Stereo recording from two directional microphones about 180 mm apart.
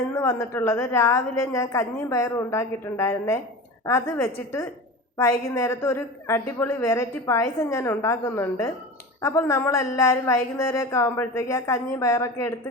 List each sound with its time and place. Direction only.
0.2 s a woman's voice: 15° left (ahead or behind)